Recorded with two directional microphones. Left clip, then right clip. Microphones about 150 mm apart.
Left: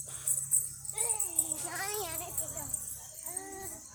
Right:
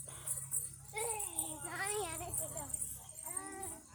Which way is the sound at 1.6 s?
70° left (ahead or behind).